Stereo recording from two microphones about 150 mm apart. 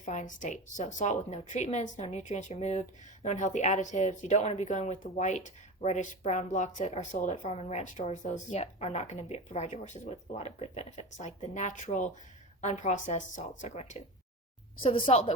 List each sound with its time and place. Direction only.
0.0 s speech: 55° left (ahead or behind)
14.8 s speech: 35° left (ahead or behind)